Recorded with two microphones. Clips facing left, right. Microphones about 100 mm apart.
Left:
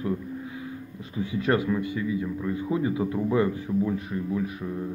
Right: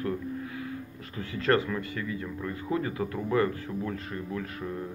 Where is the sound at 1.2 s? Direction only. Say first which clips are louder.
Left 1 dB; 15° left (ahead or behind).